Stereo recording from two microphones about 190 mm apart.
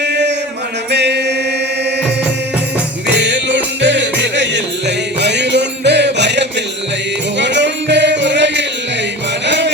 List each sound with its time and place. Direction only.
0.0 s chant: 65° right (ahead or behind)
0.9 s mantra: 65° right (ahead or behind)
3.1 s music: 70° right (ahead or behind)